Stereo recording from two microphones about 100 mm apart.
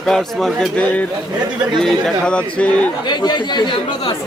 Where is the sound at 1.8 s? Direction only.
5° left (ahead or behind).